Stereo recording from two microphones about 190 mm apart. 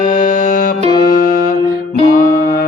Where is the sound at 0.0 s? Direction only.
45° left (ahead or behind).